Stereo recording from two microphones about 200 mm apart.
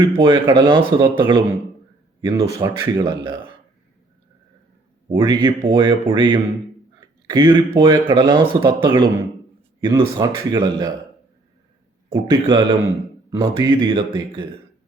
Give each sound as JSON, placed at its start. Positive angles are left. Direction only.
{"t": 0.0, "sound": "speech", "side_deg": -20}
{"t": 5.0, "sound": "speech", "side_deg": -20}
{"t": 12.1, "sound": "speech", "side_deg": -20}